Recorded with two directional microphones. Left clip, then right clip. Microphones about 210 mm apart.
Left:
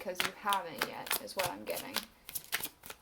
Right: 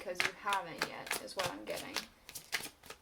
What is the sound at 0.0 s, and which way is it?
A woman's voice, 35° left (ahead or behind).